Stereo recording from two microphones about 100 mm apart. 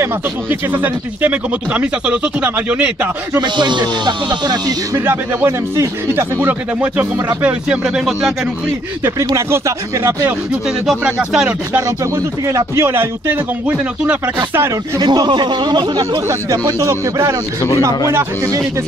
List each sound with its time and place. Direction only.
0.0 s speech: 20° right (ahead or behind)
3.3 s speech: 50° right (ahead or behind)
4.9 s speech: 20° right (ahead or behind); by 8.3 s 5° right (ahead or behind)
9.3 s speech: 30° right (ahead or behind)
10.5 s speech: 10° right (ahead or behind)
12.0 s speech: 30° right (ahead or behind)
15.0 s speech: 50° right (ahead or behind)